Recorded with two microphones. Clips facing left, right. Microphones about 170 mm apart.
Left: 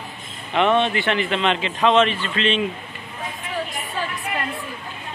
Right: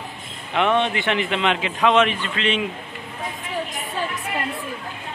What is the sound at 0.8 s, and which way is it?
A man's voice, 15° right (ahead or behind).